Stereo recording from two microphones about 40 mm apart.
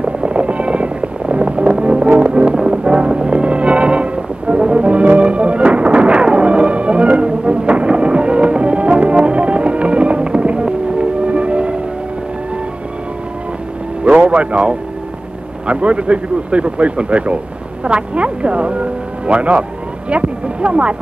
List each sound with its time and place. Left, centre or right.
0.2 s music: right
14.2 s music: right
15.6 s speech: right